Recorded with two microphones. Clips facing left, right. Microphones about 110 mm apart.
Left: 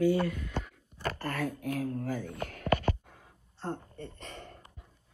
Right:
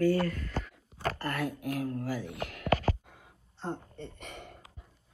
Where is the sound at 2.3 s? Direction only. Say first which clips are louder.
Even; 75° right (ahead or behind).